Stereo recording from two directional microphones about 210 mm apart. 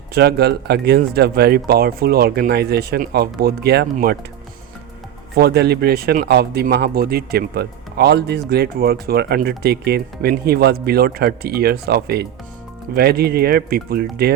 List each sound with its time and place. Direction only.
0.1 s speech: 50° right (ahead or behind)
5.4 s speech: 50° right (ahead or behind)